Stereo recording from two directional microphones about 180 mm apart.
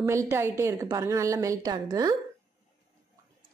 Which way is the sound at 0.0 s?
15° right (ahead or behind).